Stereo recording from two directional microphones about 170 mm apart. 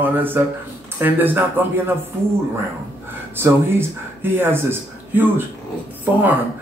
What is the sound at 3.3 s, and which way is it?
Speech, 10° right (ahead or behind).